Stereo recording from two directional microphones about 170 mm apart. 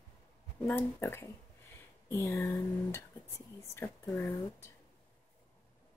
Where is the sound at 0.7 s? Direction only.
10° left (ahead or behind).